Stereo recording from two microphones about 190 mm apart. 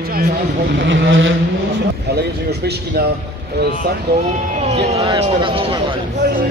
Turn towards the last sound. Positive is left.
turn(degrees=-25)  # may be behind; listen again after turning